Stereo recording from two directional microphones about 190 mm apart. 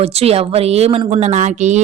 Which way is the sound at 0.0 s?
30° right (ahead or behind).